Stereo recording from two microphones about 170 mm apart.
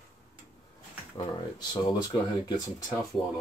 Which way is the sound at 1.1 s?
25° left (ahead or behind).